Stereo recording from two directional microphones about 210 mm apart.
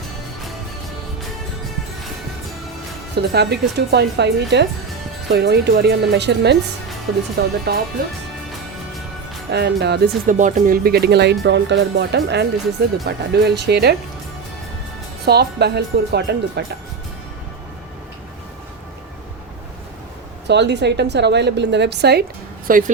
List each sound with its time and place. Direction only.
3.2 s speech: 50° right (ahead or behind)
9.5 s speech: 50° right (ahead or behind)
10.3 s a woman's voice: 35° right (ahead or behind)
15.2 s speech: 50° right (ahead or behind)
20.5 s a woman's voice: 55° right (ahead or behind)
22.6 s speech: 40° right (ahead or behind)